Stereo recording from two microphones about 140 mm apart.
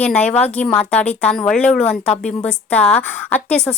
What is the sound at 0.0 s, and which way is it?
A woman's voice, 10° left (ahead or behind).